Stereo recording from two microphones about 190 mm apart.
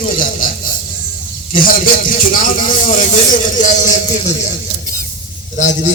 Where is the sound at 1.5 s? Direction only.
45° left (ahead or behind).